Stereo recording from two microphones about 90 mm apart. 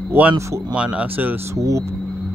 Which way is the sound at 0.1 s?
15° right (ahead or behind).